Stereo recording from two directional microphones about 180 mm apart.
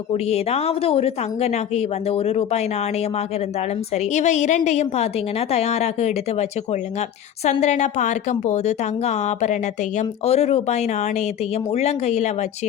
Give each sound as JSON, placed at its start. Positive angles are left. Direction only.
{"t": 0.1, "sound": "speech", "side_deg": 35}